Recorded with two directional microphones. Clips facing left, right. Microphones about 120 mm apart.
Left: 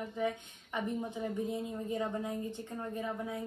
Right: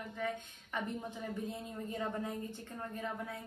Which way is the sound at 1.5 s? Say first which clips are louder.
Left 6 dB; 15° left (ahead or behind).